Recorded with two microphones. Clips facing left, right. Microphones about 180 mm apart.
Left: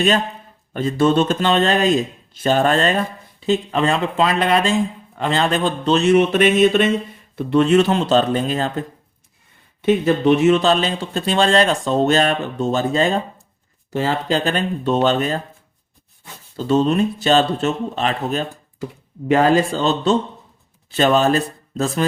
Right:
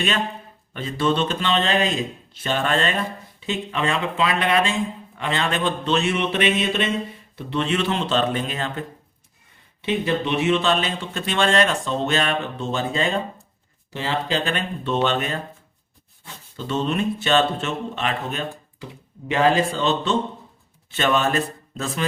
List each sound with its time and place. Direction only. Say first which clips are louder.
0.7 s speech: left 6 dB; 45° left (ahead or behind)
9.8 s speech: left 8 dB; 45° left (ahead or behind)
16.6 s speech: left 7 dB; 40° left (ahead or behind)